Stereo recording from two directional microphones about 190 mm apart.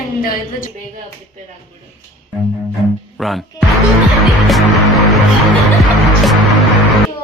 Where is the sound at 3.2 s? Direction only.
Centre (ahead or behind).